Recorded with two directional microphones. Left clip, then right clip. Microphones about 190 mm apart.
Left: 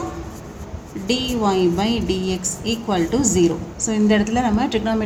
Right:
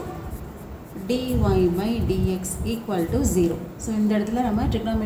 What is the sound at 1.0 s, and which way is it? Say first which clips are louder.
A woman's voice: left 5 dB; 55° left (ahead or behind).